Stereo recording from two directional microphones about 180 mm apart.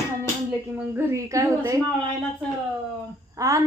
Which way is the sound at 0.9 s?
15° right (ahead or behind).